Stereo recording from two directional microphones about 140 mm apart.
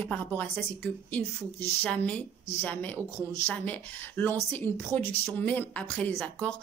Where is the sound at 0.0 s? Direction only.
10° left (ahead or behind).